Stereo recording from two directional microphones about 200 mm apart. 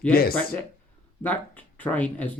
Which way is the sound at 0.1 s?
50° left (ahead or behind).